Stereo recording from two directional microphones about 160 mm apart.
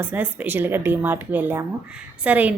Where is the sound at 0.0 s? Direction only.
10° right (ahead or behind).